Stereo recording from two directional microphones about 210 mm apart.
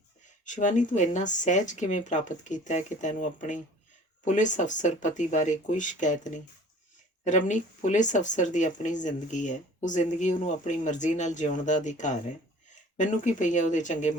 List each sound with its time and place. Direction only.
0.4 s speech: 35° left (ahead or behind)